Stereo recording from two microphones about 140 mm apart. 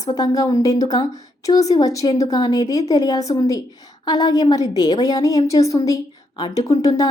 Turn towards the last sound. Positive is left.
turn(degrees=25)  # may be behind; listen again after turning